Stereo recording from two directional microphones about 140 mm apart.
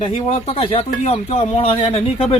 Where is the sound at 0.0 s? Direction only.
45° left (ahead or behind).